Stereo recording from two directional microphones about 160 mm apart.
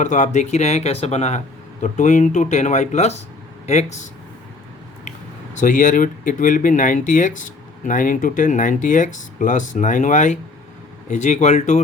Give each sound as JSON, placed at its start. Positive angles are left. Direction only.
{"t": 0.0, "sound": "speech", "side_deg": 50}
{"t": 5.5, "sound": "speech", "side_deg": 55}